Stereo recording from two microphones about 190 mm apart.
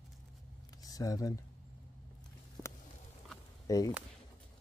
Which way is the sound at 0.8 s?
20° left (ahead or behind).